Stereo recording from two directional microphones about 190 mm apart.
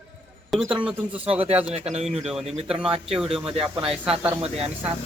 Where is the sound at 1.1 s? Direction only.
30° right (ahead or behind).